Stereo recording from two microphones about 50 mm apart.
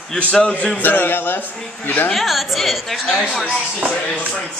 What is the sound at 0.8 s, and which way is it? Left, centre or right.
Speech, left.